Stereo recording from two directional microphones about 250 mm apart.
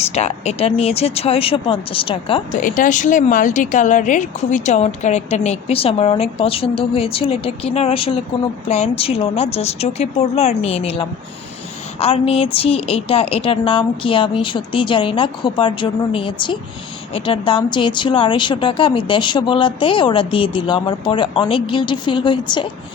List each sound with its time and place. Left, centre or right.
0.1 s speech: left
2.6 s speech: left